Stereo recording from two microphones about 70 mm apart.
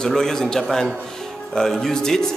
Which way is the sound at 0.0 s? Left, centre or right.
Centre.